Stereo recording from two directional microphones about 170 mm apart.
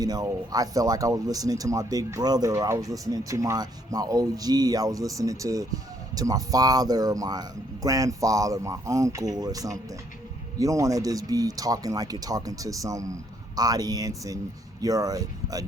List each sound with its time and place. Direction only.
0.0 s speech: 20° right (ahead or behind)